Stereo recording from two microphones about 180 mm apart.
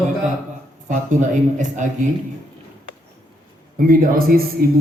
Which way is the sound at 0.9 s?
45° right (ahead or behind).